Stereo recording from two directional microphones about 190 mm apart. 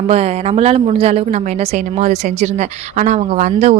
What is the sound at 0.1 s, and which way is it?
A woman's voice, 35° right (ahead or behind).